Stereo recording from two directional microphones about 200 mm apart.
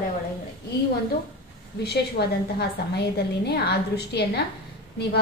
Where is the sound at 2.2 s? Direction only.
55° left (ahead or behind).